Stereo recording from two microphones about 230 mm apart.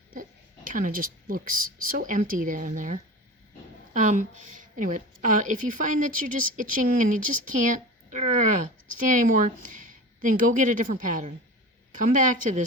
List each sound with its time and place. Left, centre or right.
0.7 s a woman's voice: right